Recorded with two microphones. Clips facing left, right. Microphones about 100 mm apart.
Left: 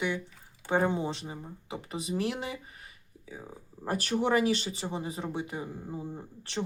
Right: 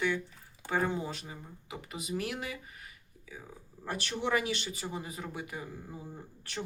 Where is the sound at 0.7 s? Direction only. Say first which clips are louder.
Left 4 dB; 25° left (ahead or behind).